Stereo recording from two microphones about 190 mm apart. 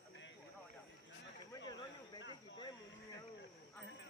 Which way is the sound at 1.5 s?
20° left (ahead or behind).